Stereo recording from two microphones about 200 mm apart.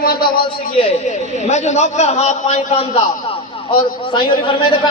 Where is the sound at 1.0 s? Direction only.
35° left (ahead or behind).